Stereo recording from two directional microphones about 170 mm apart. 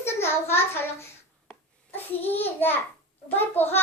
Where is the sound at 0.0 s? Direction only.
15° left (ahead or behind).